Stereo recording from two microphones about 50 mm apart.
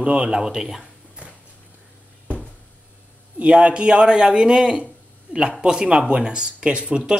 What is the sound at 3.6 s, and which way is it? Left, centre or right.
A man's voice, right.